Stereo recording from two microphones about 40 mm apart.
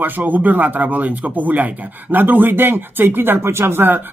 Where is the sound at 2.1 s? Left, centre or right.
Right.